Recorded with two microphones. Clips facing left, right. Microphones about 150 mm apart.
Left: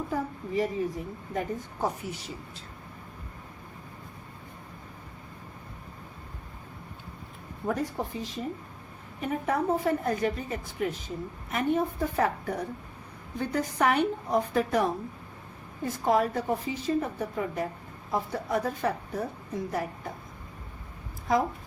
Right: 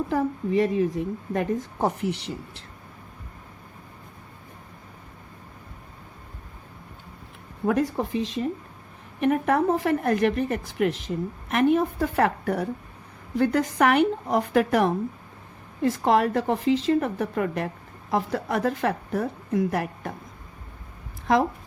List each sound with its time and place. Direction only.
0.1 s a woman's voice: 90° right; by 2.6 s 70° right (ahead or behind)
7.7 s speech: 90° right
9.2 s a woman's voice: 75° right (ahead or behind)
13.3 s a woman's voice: 90° right; by 17.7 s 75° right (ahead or behind)
18.1 s a woman's voice: 85° right